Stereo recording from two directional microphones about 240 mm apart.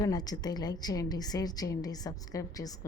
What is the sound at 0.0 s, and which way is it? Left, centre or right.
A woman's voice, centre.